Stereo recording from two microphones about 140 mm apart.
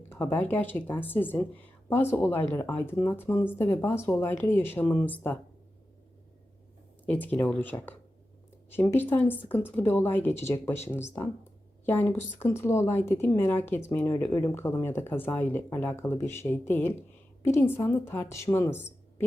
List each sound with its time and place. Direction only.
0.1 s speech: 15° left (ahead or behind)
7.0 s speech: 10° left (ahead or behind)